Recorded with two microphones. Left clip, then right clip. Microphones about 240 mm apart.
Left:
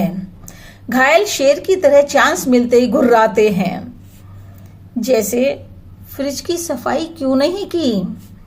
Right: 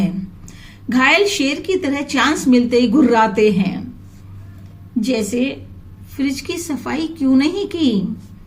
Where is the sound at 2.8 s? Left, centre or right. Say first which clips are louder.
Left 2 dB; left.